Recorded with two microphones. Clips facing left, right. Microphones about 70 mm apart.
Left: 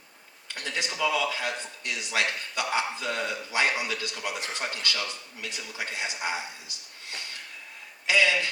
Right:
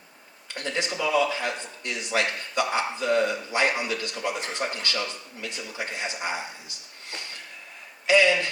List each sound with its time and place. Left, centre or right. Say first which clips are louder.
0.5 s speech: right 4 dB; right